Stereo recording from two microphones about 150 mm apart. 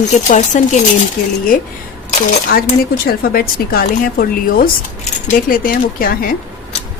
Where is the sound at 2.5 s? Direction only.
90° left.